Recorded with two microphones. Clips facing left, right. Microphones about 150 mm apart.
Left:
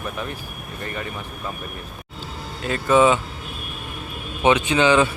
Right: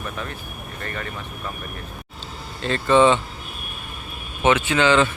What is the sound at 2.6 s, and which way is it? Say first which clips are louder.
Speech: even; 10° left (ahead or behind).